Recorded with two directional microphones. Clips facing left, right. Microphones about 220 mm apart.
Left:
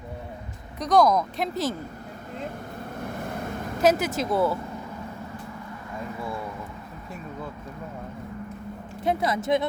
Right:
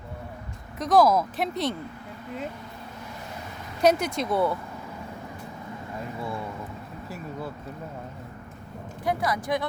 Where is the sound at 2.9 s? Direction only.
55° left (ahead or behind).